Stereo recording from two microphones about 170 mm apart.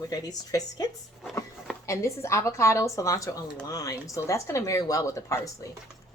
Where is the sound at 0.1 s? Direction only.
20° left (ahead or behind).